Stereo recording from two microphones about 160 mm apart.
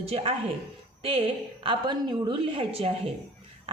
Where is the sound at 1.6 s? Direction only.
30° right (ahead or behind).